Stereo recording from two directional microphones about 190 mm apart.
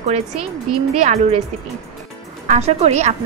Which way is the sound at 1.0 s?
35° right (ahead or behind).